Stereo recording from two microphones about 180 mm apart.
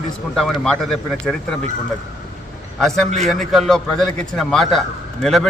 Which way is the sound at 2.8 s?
Centre (ahead or behind).